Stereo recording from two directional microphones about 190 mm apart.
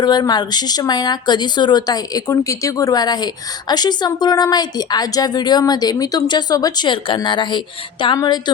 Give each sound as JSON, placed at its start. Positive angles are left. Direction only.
{"t": 0.0, "sound": "a woman's voice", "side_deg": 20}